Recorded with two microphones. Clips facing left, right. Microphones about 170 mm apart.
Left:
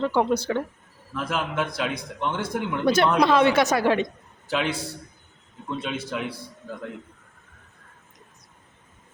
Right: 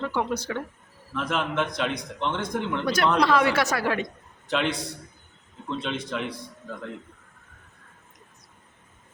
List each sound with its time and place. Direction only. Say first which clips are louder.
0.0 s speech: left 5 dB; 30° left (ahead or behind)
1.1 s a man's voice: even; 5° left (ahead or behind)
2.8 s a woman's voice: left 4 dB; 25° left (ahead or behind)
4.4 s a man's voice: even; 5° left (ahead or behind)